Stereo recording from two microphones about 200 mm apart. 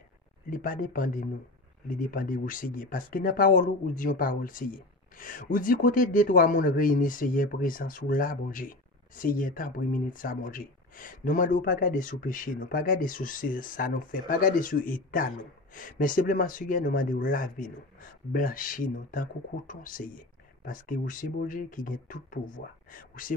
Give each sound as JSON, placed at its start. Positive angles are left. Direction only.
{"t": 0.5, "sound": "speech", "side_deg": 45}